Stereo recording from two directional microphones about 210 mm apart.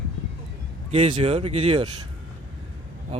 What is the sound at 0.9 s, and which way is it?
Speech, 25° right (ahead or behind).